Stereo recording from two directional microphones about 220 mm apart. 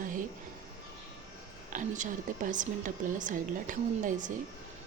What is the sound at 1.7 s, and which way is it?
A woman's voice, 35° right (ahead or behind).